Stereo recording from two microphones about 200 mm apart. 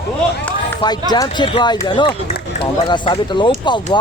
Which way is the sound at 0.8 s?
20° left (ahead or behind).